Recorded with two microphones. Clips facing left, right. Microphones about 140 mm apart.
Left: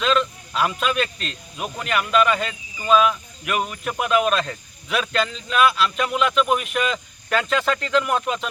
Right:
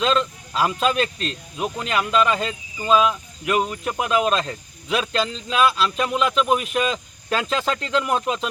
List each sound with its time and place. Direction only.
0.0 s speech: 30° right (ahead or behind)